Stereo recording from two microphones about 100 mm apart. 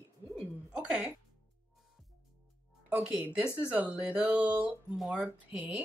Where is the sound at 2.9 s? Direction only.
10° right (ahead or behind).